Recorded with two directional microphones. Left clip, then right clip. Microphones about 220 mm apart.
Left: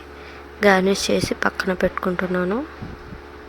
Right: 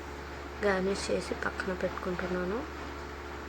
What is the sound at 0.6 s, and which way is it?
Speech, 45° left (ahead or behind).